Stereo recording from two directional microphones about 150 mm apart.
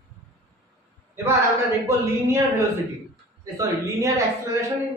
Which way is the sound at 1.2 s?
20° right (ahead or behind).